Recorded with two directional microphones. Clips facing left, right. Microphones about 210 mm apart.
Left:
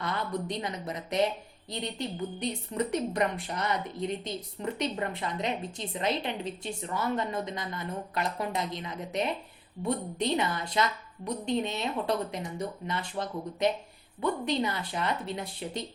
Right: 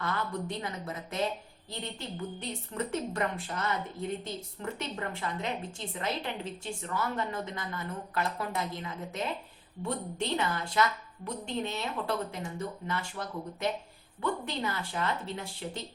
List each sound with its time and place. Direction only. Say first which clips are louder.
0.0 s a woman's voice: left 1 dB; 20° left (ahead or behind)